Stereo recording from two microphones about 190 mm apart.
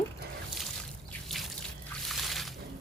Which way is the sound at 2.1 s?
Centre (ahead or behind).